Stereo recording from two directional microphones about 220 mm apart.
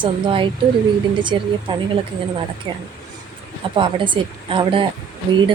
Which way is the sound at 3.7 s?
20° right (ahead or behind).